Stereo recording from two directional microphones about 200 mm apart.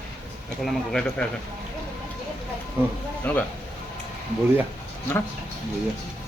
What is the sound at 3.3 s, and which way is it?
Speech, 10° left (ahead or behind).